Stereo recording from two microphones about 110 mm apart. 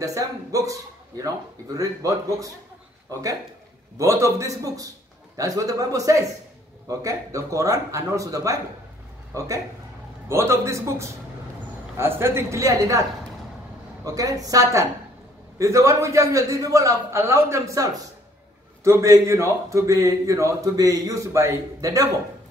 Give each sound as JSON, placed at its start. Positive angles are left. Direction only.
{"t": 0.0, "sound": "a man's voice", "side_deg": -30}
{"t": 14.0, "sound": "a man's voice", "side_deg": -35}
{"t": 18.9, "sound": "a man's voice", "side_deg": -25}